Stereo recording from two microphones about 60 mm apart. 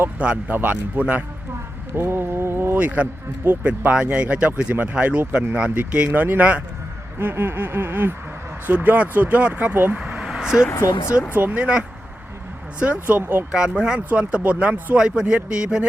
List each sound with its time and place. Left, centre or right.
0.2 s speech: centre
0.5 s speech: right
2.0 s speech: right
2.7 s speech: right
7.2 s a sound: right
8.6 s speech: right
10.2 s vehicle: centre
11.3 s speech: right
13.5 s speech: centre